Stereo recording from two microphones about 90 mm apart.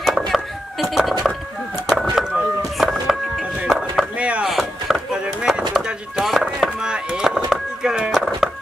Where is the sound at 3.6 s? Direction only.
Centre (ahead or behind).